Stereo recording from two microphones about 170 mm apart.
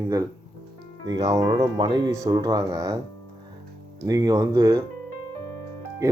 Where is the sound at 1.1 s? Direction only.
20° right (ahead or behind).